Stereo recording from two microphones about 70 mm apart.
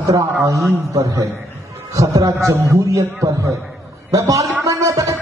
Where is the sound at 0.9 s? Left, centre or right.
Right.